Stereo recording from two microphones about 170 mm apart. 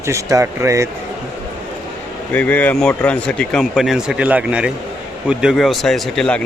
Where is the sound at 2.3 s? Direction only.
10° left (ahead or behind).